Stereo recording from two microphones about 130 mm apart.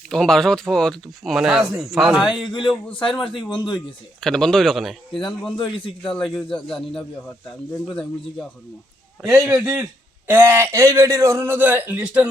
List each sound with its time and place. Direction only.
0.1 s speech: 5° left (ahead or behind)
2.3 s a man's voice: 35° left (ahead or behind)
4.2 s speech: 5° left (ahead or behind)
5.5 s a man's voice: 40° left (ahead or behind)
6.1 s speech: 5° left (ahead or behind)
9.2 s a man's voice: 20° right (ahead or behind)